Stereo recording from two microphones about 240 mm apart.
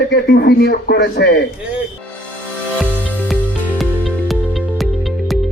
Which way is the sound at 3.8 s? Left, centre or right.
Centre.